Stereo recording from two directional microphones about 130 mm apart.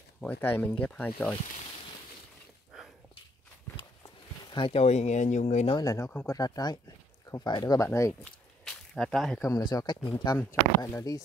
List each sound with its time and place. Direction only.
0.2 s speech: 10° left (ahead or behind)
2.7 s dog: 5° right (ahead or behind)
4.5 s a sound: 35° left (ahead or behind)
4.7 s speech: 60° left (ahead or behind)
5.8 s speech: 25° left (ahead or behind)
8.2 s a sound: 5° left (ahead or behind)
9.4 s speech: 25° left (ahead or behind)